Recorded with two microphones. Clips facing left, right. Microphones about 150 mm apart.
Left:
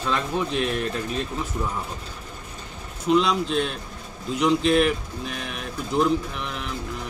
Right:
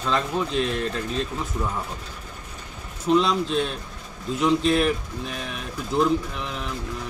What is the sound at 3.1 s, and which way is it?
Speech, centre (ahead or behind).